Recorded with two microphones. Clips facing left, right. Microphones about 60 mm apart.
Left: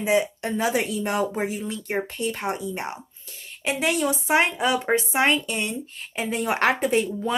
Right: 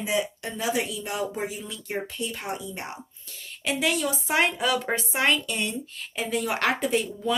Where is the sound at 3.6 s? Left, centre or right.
Left.